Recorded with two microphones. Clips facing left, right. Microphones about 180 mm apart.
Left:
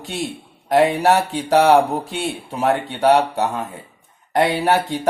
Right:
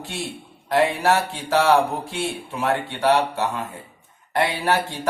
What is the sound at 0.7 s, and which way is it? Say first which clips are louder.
Speech: left 4 dB; 20° left (ahead or behind).